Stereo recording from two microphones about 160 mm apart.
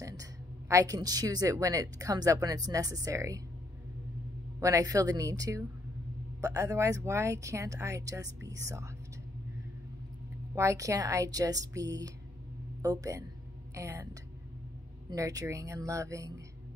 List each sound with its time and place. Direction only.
0.0 s a woman's voice: 20° right (ahead or behind)
4.6 s a woman's voice: 20° right (ahead or behind)
10.5 s a woman's voice: 20° right (ahead or behind)
15.0 s a woman's voice: 20° right (ahead or behind)